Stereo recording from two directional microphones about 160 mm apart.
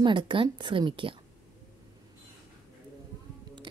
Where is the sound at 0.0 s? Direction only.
30° right (ahead or behind).